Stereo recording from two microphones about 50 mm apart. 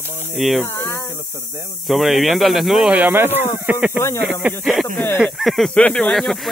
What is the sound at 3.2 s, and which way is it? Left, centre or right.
Speech, right.